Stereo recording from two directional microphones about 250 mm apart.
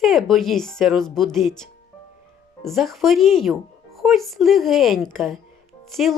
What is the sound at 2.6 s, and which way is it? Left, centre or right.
Speech, centre.